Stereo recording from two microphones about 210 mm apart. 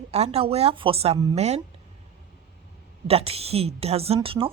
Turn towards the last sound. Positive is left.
turn(degrees=-25)  # may be behind; listen again after turning